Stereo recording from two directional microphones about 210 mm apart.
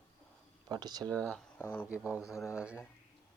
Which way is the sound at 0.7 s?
20° right (ahead or behind).